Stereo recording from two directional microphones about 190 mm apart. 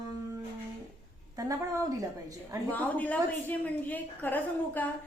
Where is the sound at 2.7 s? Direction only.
10° left (ahead or behind).